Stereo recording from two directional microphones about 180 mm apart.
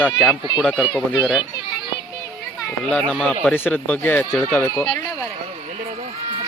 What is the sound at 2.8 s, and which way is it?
Speech, 5° left (ahead or behind).